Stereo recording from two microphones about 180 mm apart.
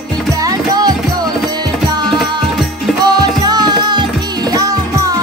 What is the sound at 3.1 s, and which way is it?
Music, 20° right (ahead or behind).